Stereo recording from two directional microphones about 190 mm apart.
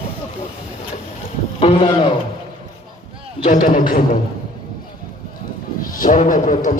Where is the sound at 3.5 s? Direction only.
45° left (ahead or behind).